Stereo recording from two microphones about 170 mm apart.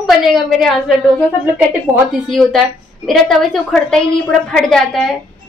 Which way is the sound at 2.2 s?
Centre (ahead or behind).